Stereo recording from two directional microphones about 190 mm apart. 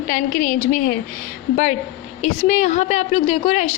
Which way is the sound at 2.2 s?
35° left (ahead or behind).